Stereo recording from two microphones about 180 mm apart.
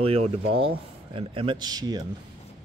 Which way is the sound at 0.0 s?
30° right (ahead or behind).